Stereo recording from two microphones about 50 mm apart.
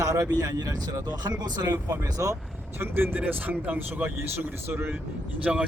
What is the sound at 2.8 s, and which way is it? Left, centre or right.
Speech, right.